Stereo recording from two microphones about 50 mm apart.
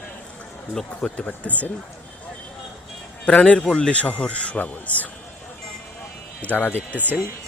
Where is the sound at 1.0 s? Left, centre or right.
Left.